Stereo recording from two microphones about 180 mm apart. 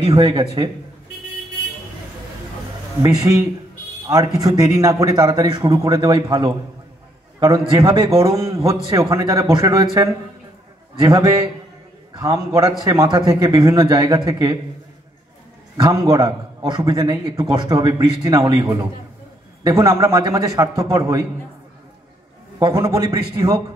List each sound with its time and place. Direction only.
0.1 s speech: 20° right (ahead or behind)
3.0 s speech: 20° right (ahead or behind)
4.4 s a man's voice: 20° right (ahead or behind)
7.7 s speech: 30° right (ahead or behind)
8.2 s a man's voice: 15° right (ahead or behind)
11.0 s a man's voice: 20° right (ahead or behind)
15.8 s a man's voice: 20° right (ahead or behind)
22.6 s speech: 25° right (ahead or behind)